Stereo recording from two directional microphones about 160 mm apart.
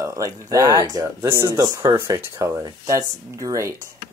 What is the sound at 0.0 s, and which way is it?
Speech, 20° right (ahead or behind).